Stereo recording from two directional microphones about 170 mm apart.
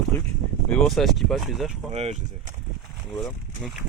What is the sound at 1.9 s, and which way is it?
Speech, 35° right (ahead or behind).